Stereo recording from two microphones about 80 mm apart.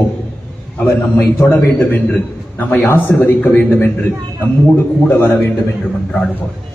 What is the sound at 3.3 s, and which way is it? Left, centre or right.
Speech, left.